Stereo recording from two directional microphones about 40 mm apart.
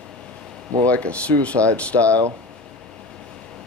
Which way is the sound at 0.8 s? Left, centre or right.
Left.